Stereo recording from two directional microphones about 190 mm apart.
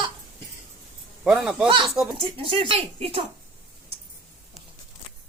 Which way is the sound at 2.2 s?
30° right (ahead or behind).